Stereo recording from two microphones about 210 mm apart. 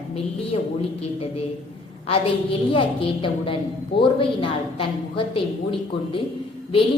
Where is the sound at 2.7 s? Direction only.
25° left (ahead or behind).